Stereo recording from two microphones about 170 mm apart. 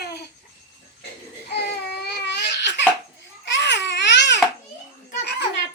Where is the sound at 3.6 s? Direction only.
90° left.